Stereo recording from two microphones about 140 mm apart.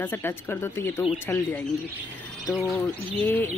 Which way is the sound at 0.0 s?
15° left (ahead or behind).